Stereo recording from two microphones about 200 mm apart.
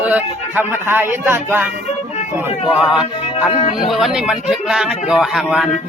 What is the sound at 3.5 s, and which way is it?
Speech, 30° left (ahead or behind).